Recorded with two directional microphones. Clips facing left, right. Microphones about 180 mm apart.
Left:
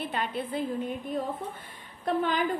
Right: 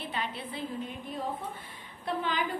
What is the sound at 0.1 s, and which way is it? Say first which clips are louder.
Speech: left 5 dB; 50° left (ahead or behind).